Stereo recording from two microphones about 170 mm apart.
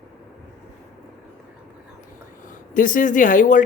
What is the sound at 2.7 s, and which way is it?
Speech, 50° left (ahead or behind).